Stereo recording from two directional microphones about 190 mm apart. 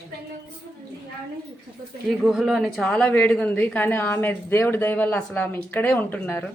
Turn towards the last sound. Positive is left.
turn(degrees=10)  # may be behind; listen again after turning